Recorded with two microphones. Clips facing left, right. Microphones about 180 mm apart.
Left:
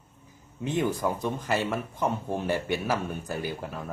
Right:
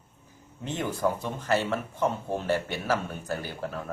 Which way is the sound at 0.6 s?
15° left (ahead or behind).